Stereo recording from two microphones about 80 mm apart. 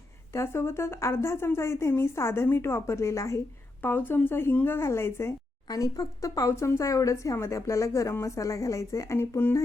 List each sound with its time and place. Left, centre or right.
0.3 s speech: left
3.8 s speech: left
5.6 s speech: left